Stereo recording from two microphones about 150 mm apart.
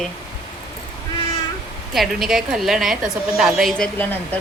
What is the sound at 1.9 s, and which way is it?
Speech, centre (ahead or behind).